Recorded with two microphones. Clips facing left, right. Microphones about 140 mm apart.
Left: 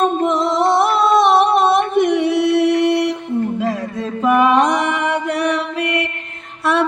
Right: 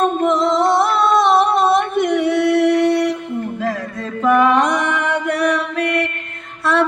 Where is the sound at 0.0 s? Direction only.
20° left (ahead or behind).